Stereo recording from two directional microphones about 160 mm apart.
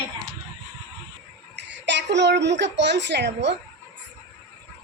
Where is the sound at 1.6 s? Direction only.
90° right.